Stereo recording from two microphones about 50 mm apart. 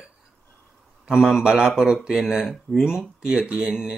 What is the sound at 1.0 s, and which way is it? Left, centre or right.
Speech, centre.